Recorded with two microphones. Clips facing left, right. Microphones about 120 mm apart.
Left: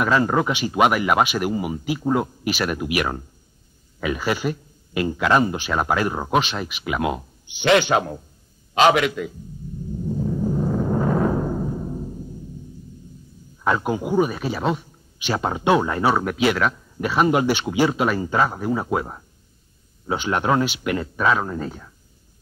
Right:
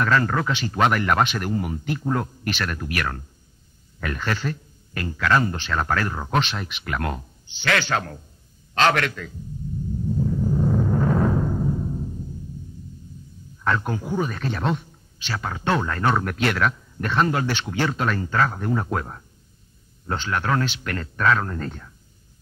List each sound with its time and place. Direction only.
0.0 s speech: 15° left (ahead or behind)
6.4 s speech: 5° left (ahead or behind)
10.9 s timpani: 10° left (ahead or behind)
11.9 s music: 20° left (ahead or behind)
13.7 s speech: 10° left (ahead or behind)
15.1 s speech: 20° left (ahead or behind)